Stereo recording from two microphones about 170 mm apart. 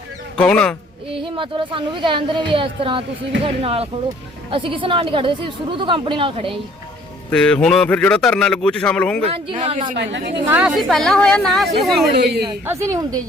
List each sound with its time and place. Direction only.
0.3 s a man's voice: 5° left (ahead or behind)
1.1 s a woman's voice: 30° right (ahead or behind)
7.3 s a man's voice: 5° left (ahead or behind)
9.3 s speech: 35° right (ahead or behind)
10.0 s a woman's voice: 85° right
10.5 s a man's voice: 5° right (ahead or behind)
12.1 s a woman's voice: 75° right (ahead or behind)
12.6 s a woman's voice: 15° right (ahead or behind)